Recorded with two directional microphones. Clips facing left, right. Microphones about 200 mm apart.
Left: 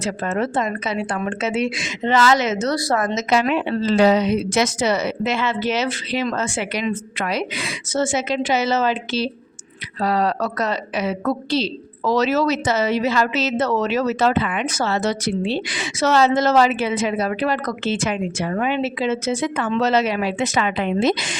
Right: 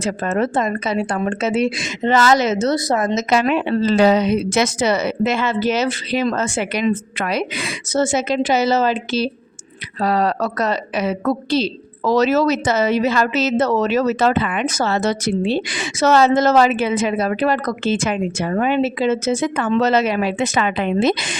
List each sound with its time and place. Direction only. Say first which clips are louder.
0.0 s a woman's voice: right 3 dB; 45° right (ahead or behind); by 3.2 s 20° right (ahead or behind)
3.2 s a woman's voice: right 2 dB; 50° right (ahead or behind)
8.0 s a woman's voice: right 3 dB; 40° right (ahead or behind); by 21.3 s 55° right (ahead or behind)